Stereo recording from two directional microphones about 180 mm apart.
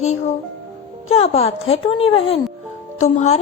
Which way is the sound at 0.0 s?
40° left (ahead or behind).